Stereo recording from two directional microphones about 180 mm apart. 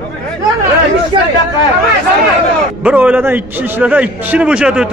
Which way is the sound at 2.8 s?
10° right (ahead or behind).